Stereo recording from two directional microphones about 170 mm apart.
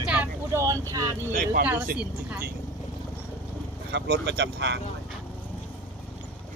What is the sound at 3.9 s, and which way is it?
Speech, 90° right.